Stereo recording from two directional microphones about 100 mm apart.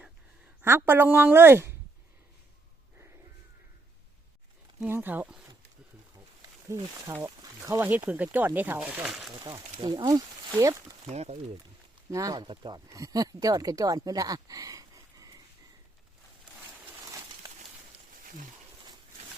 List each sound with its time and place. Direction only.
0.6 s a woman's voice: 25° right (ahead or behind)
4.8 s speech: 20° right (ahead or behind)
6.7 s a woman's voice: 25° right (ahead or behind)
9.0 s speech: 5° right (ahead or behind)
9.3 s speech: 45° right (ahead or behind)
11.1 s speech: 90° right
12.1 s speech: 35° right (ahead or behind)
12.9 s speech: 35° right (ahead or behind)
17.1 s a sound: 35° right (ahead or behind)